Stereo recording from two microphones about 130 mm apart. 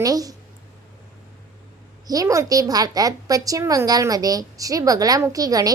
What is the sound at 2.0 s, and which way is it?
A woman's voice, 25° right (ahead or behind).